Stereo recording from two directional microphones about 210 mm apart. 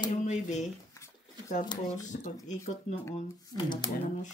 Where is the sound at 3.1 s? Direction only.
20° left (ahead or behind).